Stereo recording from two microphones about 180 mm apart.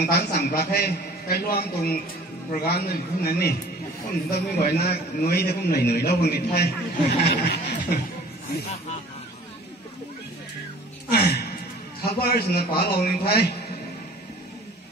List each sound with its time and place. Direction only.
0.0 s a man's voice: 65° left (ahead or behind)
11.1 s gasp: 65° left (ahead or behind)
12.0 s a man's voice: 60° left (ahead or behind)